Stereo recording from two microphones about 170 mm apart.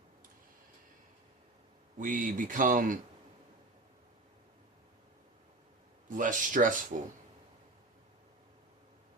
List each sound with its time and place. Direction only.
2.0 s speech: 50° right (ahead or behind)
6.1 s speech: 50° right (ahead or behind)